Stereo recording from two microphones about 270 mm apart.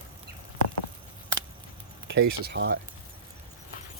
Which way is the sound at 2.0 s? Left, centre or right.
Right.